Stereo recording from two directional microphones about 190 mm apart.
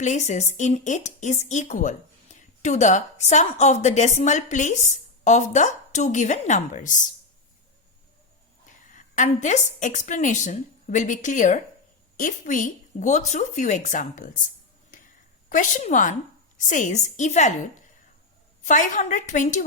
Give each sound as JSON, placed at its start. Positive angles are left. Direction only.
{"t": 0.0, "sound": "speech", "side_deg": 40}
{"t": 8.9, "sound": "speech", "side_deg": 40}
{"t": 15.4, "sound": "a woman's voice", "side_deg": 45}